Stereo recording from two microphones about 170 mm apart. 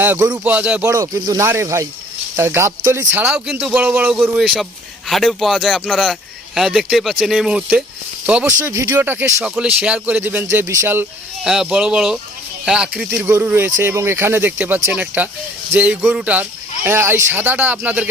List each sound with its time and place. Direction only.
0.0 s speech: 10° right (ahead or behind)
8.4 s speech: 15° right (ahead or behind)
11.4 s speech: 5° right (ahead or behind)